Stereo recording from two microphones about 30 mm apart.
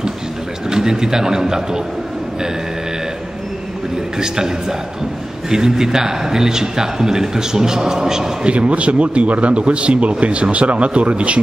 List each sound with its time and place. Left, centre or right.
0.7 s a man's voice: right
4.2 s a man's voice: centre
8.5 s speech: right